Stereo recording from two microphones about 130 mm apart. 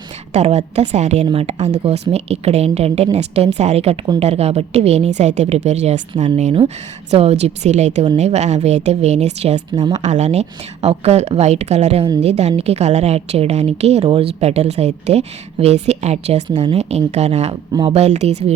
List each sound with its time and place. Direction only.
0.3 s a woman's voice: 55° right (ahead or behind)
1.3 s speech: 50° right (ahead or behind)
1.5 s a woman's voice: 60° right (ahead or behind)
7.1 s a woman's voice: 55° right (ahead or behind)
17.5 s speech: 40° right (ahead or behind)
17.9 s a woman's voice: 55° right (ahead or behind)